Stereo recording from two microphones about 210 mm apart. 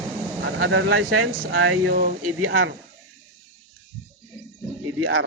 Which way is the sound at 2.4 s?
80° right.